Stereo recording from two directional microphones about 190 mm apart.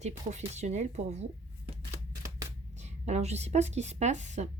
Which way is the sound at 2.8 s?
35° right (ahead or behind).